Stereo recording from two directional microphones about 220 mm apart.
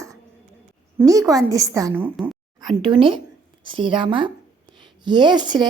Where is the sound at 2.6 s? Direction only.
20° right (ahead or behind).